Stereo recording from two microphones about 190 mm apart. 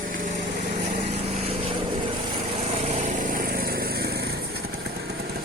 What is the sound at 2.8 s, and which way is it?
Lawn mower, 35° right (ahead or behind).